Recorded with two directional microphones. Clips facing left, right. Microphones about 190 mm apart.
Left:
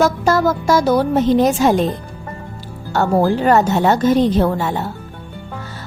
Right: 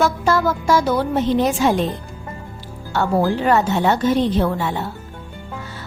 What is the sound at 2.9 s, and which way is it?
A woman's voice, 45° left (ahead or behind).